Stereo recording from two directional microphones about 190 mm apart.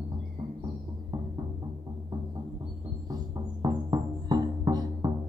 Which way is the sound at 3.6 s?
20° right (ahead or behind).